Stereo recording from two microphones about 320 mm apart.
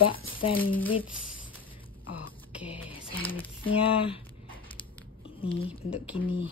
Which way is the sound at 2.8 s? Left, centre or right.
Centre.